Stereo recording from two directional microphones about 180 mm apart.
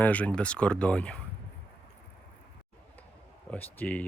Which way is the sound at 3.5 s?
10° left (ahead or behind).